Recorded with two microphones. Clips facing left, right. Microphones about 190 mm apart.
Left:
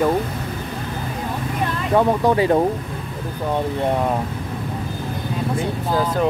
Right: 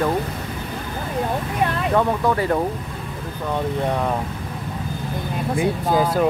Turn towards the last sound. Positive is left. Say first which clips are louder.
# right 1 dB
turn(degrees=-15)  # may be behind; listen again after turning